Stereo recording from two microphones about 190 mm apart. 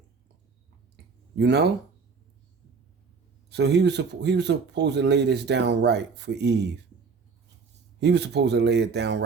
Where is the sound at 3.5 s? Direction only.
60° right (ahead or behind).